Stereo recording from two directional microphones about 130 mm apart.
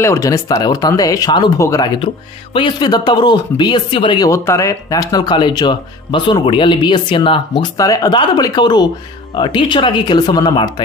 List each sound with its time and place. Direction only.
0.0 s speech: 25° left (ahead or behind)
2.5 s speech: 35° left (ahead or behind)
4.3 s speech: 25° left (ahead or behind); by 7.6 s 40° left (ahead or behind)
7.7 s speech: 25° left (ahead or behind)